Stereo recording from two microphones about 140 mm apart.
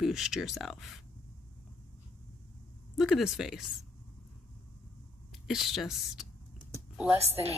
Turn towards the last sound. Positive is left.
turn(degrees=-45)  # may be behind; listen again after turning